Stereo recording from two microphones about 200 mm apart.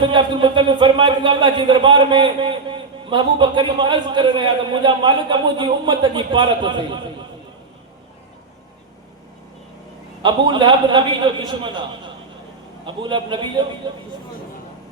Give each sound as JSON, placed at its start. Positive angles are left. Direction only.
{"t": 0.0, "sound": "speech", "side_deg": -25}
{"t": 10.2, "sound": "speech", "side_deg": -25}